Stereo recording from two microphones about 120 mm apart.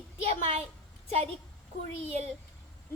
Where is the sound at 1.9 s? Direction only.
55° right (ahead or behind).